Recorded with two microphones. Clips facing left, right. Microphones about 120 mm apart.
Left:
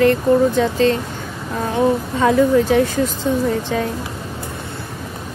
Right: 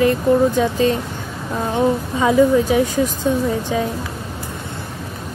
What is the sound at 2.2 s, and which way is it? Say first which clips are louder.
Speech: right 1 dB; 10° right (ahead or behind).